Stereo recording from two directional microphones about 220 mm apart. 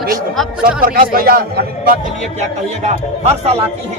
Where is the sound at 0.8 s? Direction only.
40° right (ahead or behind).